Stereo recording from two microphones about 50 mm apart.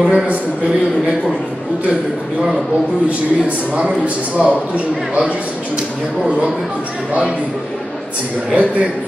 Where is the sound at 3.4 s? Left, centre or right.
Right.